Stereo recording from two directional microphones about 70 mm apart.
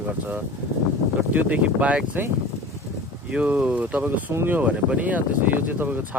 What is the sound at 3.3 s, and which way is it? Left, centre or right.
Speech, centre.